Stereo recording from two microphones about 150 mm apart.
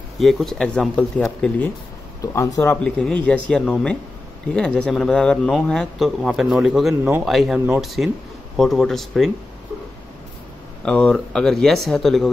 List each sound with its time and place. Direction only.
0.2 s a man's voice: centre (ahead or behind)
2.3 s speech: 20° left (ahead or behind)
2.8 s a man's voice: 5° left (ahead or behind)
10.8 s a man's voice: 5° left (ahead or behind)